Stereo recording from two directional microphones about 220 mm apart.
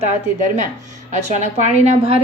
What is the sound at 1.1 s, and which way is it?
Speech, 30° right (ahead or behind).